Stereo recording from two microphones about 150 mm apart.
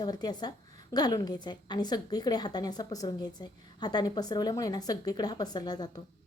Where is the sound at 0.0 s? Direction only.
25° left (ahead or behind).